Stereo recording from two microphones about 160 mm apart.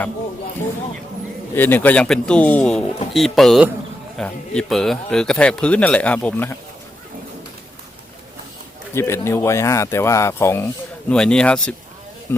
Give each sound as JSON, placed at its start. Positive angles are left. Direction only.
{"t": 1.5, "sound": "speech", "side_deg": 10}
{"t": 9.0, "sound": "speech", "side_deg": 15}
{"t": 11.1, "sound": "speech", "side_deg": 5}